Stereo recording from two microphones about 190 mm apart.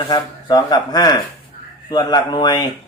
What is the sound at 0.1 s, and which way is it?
Speech, 20° left (ahead or behind).